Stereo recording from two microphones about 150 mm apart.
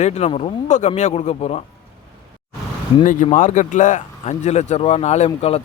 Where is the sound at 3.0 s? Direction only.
60° left (ahead or behind); by 5.6 s 40° left (ahead or behind).